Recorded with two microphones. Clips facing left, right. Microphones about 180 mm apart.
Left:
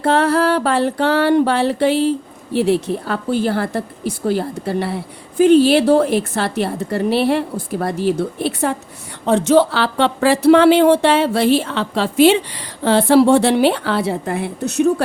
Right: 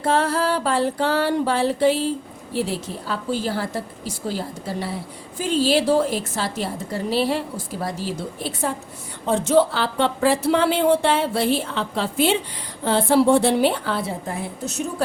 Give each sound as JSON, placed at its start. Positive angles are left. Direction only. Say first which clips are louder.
{"t": 0.0, "sound": "music", "louder": "left 6 dB", "side_deg": 65}
{"t": 9.2, "sound": "speech", "louder": "left 5 dB", "side_deg": 75}